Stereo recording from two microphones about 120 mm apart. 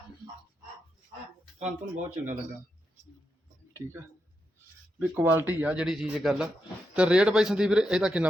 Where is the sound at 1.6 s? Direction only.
90° right.